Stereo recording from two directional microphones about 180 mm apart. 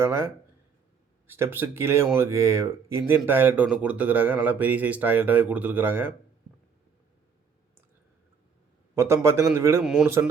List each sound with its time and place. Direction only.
0.0 s speech: 15° right (ahead or behind)
1.3 s speech: 10° right (ahead or behind)
9.0 s speech: 15° right (ahead or behind)
9.8 s a man's voice: 5° right (ahead or behind)